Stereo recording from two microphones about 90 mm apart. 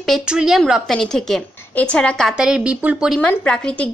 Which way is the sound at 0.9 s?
5° left (ahead or behind).